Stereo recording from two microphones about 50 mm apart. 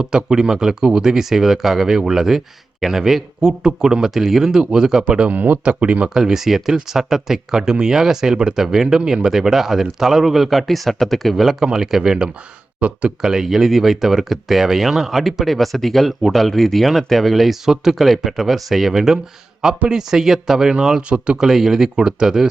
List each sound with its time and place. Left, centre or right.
0.0 s speech: centre
5.3 s speech: right
6.1 s speech: centre
12.8 s speech: right
13.2 s speech: centre